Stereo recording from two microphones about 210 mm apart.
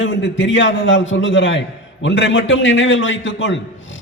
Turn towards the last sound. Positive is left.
turn(degrees=60)  # may be behind; listen again after turning